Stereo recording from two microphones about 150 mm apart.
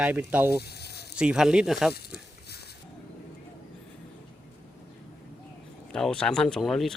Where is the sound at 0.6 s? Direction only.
90° left.